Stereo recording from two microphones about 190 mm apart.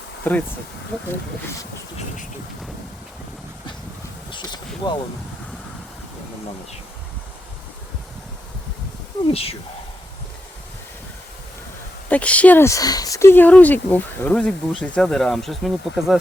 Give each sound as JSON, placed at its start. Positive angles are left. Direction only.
{"t": 0.3, "sound": "speech", "side_deg": 10}
{"t": 4.3, "sound": "a sound", "side_deg": 25}
{"t": 9.3, "sound": "speech", "side_deg": 30}
{"t": 12.0, "sound": "speech", "side_deg": 5}